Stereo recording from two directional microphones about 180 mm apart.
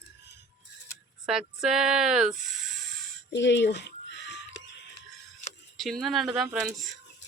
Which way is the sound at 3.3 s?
75° left (ahead or behind).